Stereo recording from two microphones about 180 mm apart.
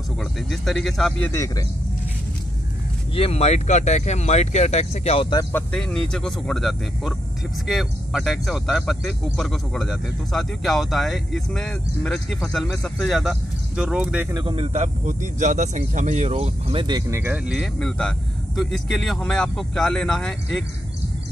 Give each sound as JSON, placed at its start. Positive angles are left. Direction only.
{"t": 0.5, "sound": "speech", "side_deg": 0}
{"t": 1.3, "sound": "speech", "side_deg": 15}
{"t": 3.2, "sound": "speech", "side_deg": 35}
{"t": 5.5, "sound": "speech", "side_deg": 5}
{"t": 14.3, "sound": "speech", "side_deg": -30}
{"t": 17.2, "sound": "speech", "side_deg": -5}